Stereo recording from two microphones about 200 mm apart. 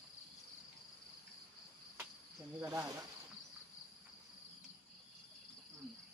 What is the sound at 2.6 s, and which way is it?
Speech, 15° right (ahead or behind).